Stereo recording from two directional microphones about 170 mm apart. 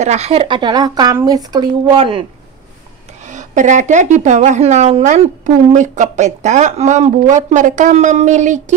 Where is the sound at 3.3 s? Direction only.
45° right (ahead or behind).